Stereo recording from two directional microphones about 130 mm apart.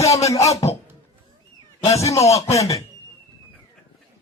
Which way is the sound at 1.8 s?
25° left (ahead or behind).